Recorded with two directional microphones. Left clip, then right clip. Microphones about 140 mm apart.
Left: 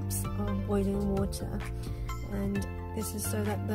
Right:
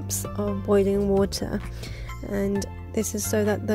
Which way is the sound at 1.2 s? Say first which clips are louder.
Right 10 dB; 50° right (ahead or behind).